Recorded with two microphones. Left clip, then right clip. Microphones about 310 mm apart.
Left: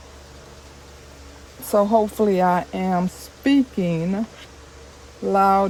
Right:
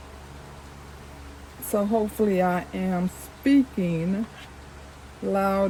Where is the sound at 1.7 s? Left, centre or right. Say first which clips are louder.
Left 7 dB; left.